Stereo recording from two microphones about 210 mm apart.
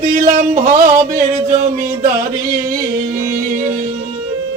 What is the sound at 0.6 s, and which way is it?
Music, 40° right (ahead or behind).